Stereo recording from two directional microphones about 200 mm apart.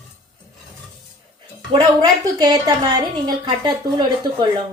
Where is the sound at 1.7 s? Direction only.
20° right (ahead or behind).